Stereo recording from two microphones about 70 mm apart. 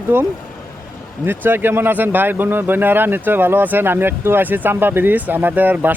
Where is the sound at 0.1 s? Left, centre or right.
Right.